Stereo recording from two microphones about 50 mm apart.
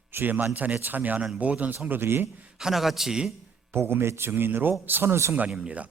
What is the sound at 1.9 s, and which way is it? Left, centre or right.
Speech, right.